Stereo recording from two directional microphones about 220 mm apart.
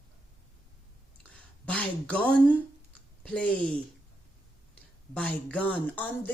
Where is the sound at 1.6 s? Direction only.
5° left (ahead or behind).